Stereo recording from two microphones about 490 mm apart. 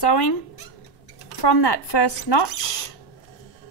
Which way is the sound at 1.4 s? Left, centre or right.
Left.